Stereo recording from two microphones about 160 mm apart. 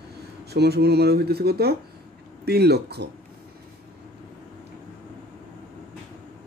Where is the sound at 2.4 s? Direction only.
90° right.